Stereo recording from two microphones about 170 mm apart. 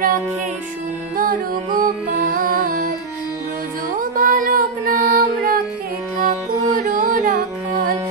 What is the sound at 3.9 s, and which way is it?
Music, 55° right (ahead or behind).